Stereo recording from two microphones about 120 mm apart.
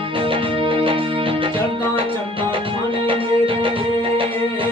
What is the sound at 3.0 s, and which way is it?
Music, 45° right (ahead or behind).